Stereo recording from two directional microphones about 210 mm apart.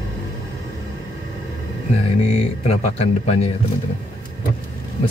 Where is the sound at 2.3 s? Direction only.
30° left (ahead or behind).